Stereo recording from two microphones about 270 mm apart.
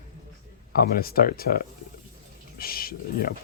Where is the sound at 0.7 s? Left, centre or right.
Left.